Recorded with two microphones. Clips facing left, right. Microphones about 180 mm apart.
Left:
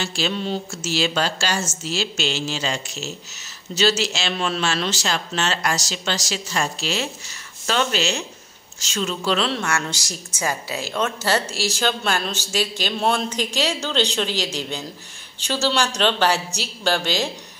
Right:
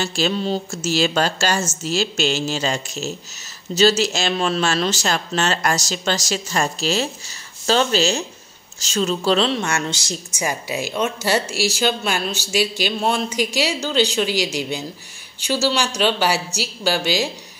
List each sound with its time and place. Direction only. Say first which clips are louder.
0.0 s a woman's voice: right 4 dB; 45° right (ahead or behind)
9.5 s a woman's voice: right 2 dB; 20° right (ahead or behind)